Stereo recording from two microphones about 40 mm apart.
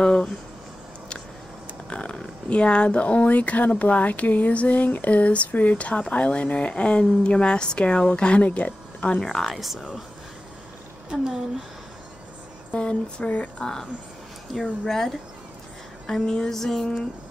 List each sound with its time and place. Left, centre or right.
0.0 s speech: left
1.9 s speech: left
8.4 s speech: left
9.2 s speech: centre
9.6 s speech: centre
12.7 s speech: left
14.5 s speech: centre